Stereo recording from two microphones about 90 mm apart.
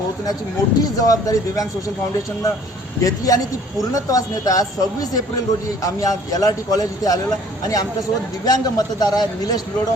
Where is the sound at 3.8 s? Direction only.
40° left (ahead or behind).